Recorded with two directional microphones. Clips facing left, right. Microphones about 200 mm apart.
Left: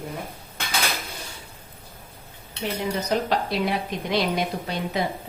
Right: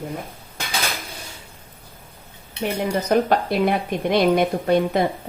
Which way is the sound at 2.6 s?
55° right (ahead or behind).